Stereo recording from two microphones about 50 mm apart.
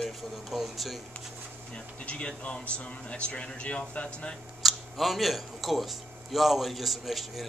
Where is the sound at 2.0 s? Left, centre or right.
Left.